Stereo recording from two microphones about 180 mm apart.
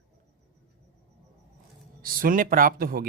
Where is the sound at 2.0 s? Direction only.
50° right (ahead or behind).